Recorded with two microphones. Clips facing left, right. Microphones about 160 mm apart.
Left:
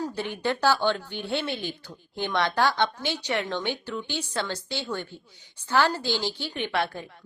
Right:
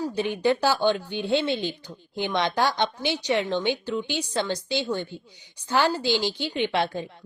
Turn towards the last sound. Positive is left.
turn(degrees=-20)  # may be behind; listen again after turning